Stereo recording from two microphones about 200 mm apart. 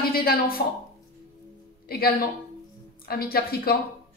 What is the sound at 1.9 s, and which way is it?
A woman's voice, 50° left (ahead or behind).